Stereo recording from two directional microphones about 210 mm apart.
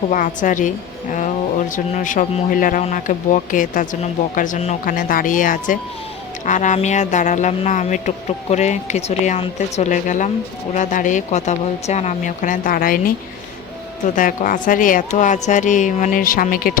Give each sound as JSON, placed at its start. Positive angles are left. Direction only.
{"t": 0.1, "sound": "speech", "side_deg": 40}
{"t": 14.2, "sound": "speech", "side_deg": 40}